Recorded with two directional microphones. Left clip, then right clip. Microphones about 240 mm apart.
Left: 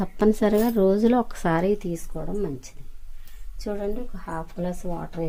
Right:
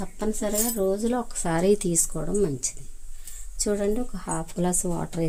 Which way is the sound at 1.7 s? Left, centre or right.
Right.